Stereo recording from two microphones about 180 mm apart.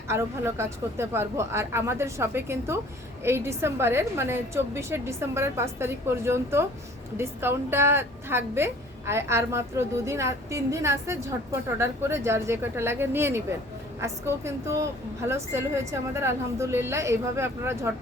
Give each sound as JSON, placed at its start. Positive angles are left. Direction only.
{"t": 0.1, "sound": "a woman's voice", "side_deg": -15}